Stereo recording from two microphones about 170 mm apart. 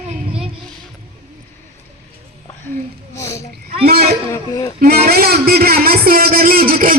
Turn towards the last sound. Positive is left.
turn(degrees=-55)  # may be behind; listen again after turning